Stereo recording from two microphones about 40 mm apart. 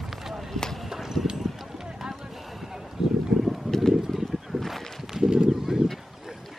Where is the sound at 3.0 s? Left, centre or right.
Centre.